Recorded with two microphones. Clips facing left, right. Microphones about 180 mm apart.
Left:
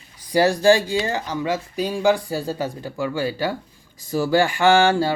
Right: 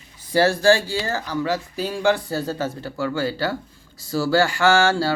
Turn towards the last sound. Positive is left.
turn(degrees=20)  # may be behind; listen again after turning